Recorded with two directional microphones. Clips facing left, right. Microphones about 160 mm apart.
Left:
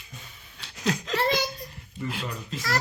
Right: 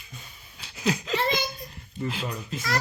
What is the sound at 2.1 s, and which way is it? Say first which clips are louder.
Speech: right 1 dB; centre (ahead or behind).